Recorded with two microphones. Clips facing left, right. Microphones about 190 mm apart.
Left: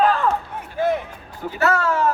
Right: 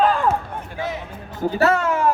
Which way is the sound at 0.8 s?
55° left (ahead or behind).